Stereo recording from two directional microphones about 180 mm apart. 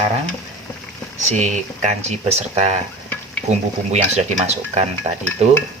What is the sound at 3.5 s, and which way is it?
Speech, 40° right (ahead or behind).